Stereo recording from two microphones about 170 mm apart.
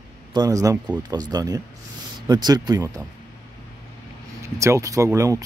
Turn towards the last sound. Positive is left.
turn(degrees=-20)  # may be behind; listen again after turning